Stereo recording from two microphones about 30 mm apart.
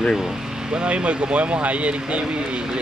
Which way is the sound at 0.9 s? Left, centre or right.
Right.